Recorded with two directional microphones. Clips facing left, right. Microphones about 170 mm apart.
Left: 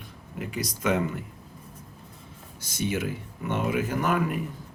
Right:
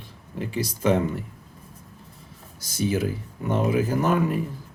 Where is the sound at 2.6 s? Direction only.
35° right (ahead or behind).